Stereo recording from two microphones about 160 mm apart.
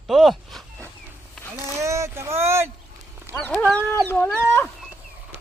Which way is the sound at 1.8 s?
20° right (ahead or behind).